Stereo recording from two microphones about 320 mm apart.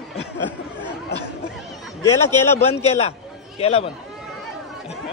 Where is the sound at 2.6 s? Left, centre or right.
Centre.